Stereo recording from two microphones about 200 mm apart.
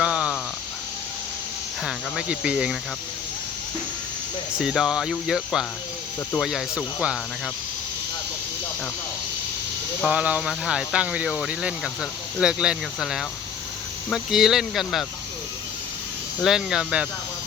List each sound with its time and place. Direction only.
0.0 s a sound: 5° right (ahead or behind)
1.8 s speech: 5° right (ahead or behind)
4.5 s speech: 5° right (ahead or behind)
10.1 s speech: 5° right (ahead or behind)
16.4 s speech: centre (ahead or behind)